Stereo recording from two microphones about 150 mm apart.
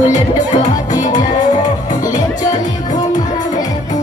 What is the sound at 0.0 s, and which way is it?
Music, 55° left (ahead or behind).